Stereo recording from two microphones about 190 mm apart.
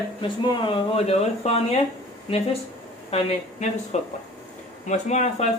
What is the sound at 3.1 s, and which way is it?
Speech, 30° left (ahead or behind).